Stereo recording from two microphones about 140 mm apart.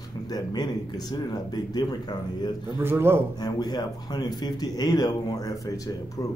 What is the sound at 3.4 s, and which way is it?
Speech, 30° left (ahead or behind).